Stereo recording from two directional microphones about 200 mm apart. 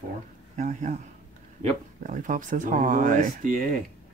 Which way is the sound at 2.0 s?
40° right (ahead or behind).